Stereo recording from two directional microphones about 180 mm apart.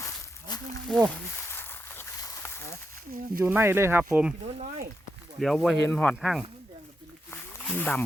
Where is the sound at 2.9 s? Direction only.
50° right (ahead or behind).